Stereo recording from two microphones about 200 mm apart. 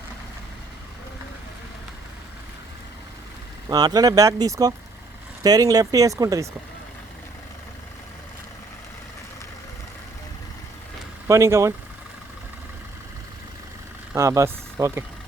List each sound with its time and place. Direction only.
3.7 s speech: 20° right (ahead or behind)
11.3 s speech: 15° right (ahead or behind)
14.1 s speech: 15° right (ahead or behind)